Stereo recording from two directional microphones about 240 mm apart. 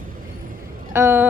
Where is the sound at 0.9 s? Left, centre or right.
Centre.